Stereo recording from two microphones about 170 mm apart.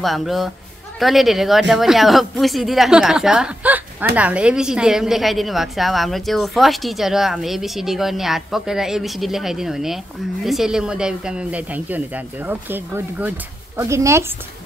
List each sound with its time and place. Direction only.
0.0 s speech: centre (ahead or behind); by 14.2 s 15° right (ahead or behind)